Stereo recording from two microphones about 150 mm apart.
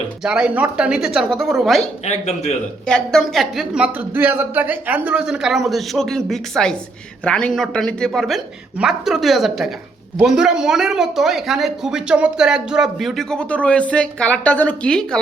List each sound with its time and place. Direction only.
0.2 s a woman's voice: 5° right (ahead or behind)
2.0 s speech: 45° left (ahead or behind)
2.8 s a woman's voice: 5° left (ahead or behind)